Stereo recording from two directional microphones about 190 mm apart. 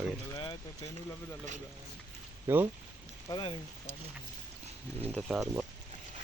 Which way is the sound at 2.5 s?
10° right (ahead or behind).